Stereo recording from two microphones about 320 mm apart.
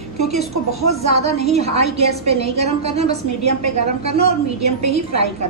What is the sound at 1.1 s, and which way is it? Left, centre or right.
A woman's voice, centre.